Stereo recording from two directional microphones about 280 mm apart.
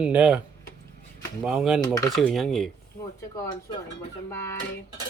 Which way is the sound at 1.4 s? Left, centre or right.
Centre.